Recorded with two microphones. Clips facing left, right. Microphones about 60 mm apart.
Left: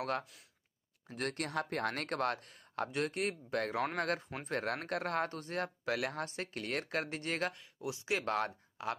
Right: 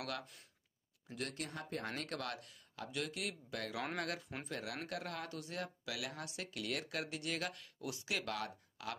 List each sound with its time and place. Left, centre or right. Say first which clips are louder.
0.2 s speech: left 1 dB; centre
1.0 s speech: left 6 dB; left
4.5 s speech: left 8 dB; left
7.5 s speech: left 4 dB; left